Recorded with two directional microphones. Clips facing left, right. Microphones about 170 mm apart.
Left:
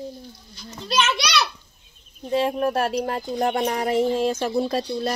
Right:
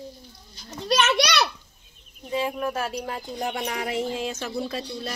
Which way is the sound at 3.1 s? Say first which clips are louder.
Left 6 dB; 50° left (ahead or behind).